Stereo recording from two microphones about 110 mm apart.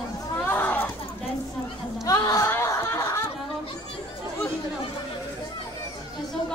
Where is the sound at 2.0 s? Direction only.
30° left (ahead or behind).